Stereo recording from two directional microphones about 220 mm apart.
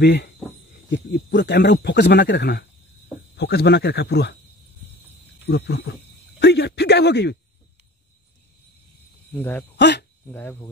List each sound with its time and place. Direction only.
0.0 s speech: 50° left (ahead or behind)
5.5 s speech: 45° left (ahead or behind)
9.3 s speech: 10° left (ahead or behind)
9.8 s speech: 50° left (ahead or behind)
10.3 s speech: 10° left (ahead or behind)